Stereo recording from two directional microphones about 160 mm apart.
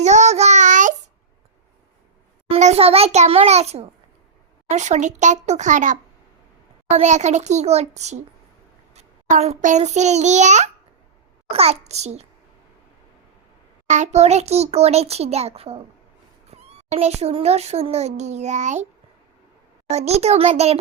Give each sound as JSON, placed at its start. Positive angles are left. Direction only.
{"t": 0.0, "sound": "child singing", "side_deg": -45}
{"t": 2.5, "sound": "a child's voice", "side_deg": -40}
{"t": 13.8, "sound": "speech", "side_deg": -45}
{"t": 19.9, "sound": "speech", "side_deg": -40}